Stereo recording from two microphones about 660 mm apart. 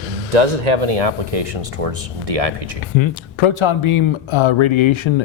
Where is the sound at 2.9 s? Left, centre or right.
Left.